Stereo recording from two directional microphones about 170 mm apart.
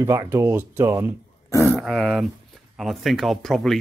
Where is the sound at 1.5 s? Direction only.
15° left (ahead or behind).